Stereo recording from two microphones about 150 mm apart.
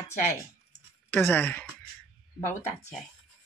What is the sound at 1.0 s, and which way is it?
Speech, 10° left (ahead or behind).